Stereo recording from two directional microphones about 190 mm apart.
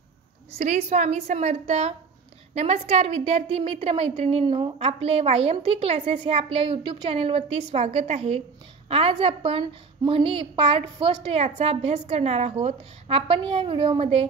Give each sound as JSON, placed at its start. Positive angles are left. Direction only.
{"t": 0.6, "sound": "a woman's voice", "side_deg": -35}